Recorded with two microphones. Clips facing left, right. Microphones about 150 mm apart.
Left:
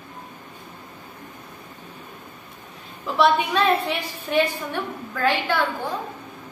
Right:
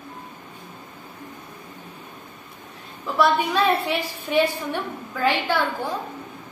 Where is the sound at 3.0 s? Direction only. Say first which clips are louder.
Left 1 dB; centre (ahead or behind).